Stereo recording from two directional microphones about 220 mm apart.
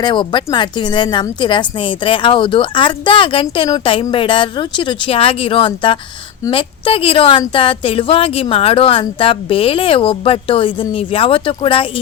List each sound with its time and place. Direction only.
0.0 s a woman's voice: 20° left (ahead or behind)